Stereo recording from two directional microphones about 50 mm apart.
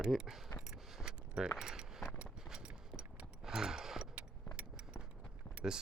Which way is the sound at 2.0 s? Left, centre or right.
Centre.